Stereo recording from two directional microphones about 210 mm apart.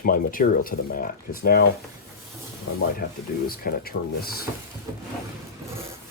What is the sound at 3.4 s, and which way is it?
Speech, 45° left (ahead or behind).